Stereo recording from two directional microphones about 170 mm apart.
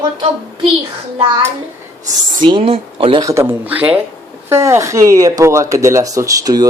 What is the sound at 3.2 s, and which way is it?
Speech, 20° right (ahead or behind).